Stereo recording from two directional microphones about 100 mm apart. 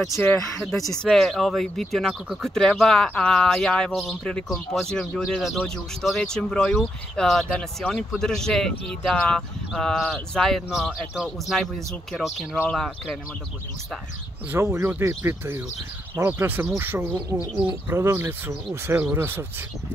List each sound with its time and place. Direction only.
0.3 s speech: 5° left (ahead or behind)
14.5 s speech: 25° right (ahead or behind)